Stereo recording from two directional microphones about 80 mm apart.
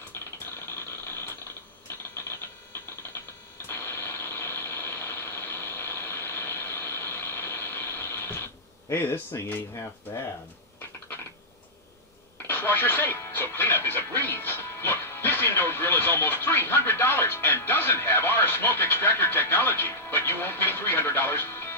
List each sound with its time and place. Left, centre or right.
3.6 s a sound: left
8.9 s speech: left
12.4 s music: left